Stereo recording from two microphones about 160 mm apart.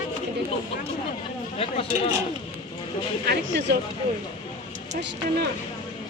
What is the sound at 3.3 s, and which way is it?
Speech, 90° right.